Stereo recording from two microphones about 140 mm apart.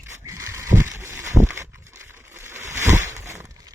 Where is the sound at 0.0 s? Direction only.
20° right (ahead or behind).